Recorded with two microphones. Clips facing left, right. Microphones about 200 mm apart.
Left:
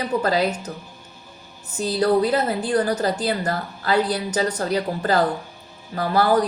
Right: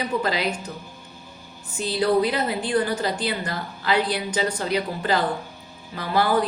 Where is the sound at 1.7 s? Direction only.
40° left (ahead or behind).